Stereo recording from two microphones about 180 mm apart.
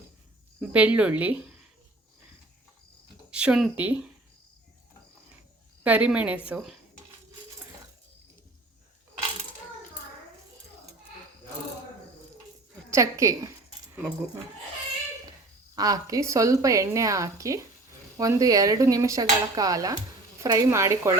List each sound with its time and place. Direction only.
0.6 s speech: 10° right (ahead or behind)
3.3 s a woman's voice: 5° right (ahead or behind)
5.8 s a woman's voice: 10° right (ahead or behind)
6.5 s dishes: 5° right (ahead or behind)
12.9 s a woman's voice: 15° right (ahead or behind)
15.7 s a woman's voice: 20° right (ahead or behind)
18.2 s dishes: 20° right (ahead or behind)
20.4 s a woman's voice: 20° right (ahead or behind)